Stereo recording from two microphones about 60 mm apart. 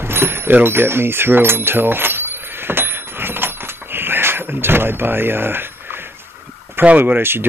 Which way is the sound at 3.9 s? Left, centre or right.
Right.